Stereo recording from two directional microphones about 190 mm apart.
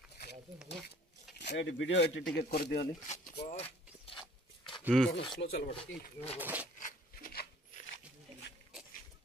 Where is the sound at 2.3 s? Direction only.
60° left (ahead or behind).